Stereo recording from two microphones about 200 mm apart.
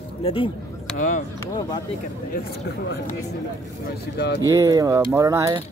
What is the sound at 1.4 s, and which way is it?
Speech, 20° left (ahead or behind).